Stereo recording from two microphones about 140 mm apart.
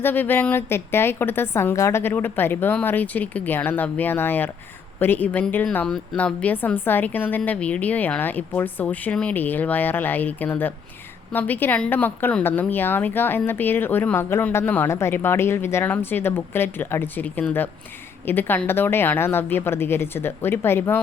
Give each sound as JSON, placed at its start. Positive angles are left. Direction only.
{"t": 0.0, "sound": "a woman's voice", "side_deg": 15}